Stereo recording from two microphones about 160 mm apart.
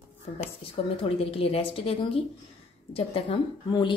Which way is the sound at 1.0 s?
35° left (ahead or behind).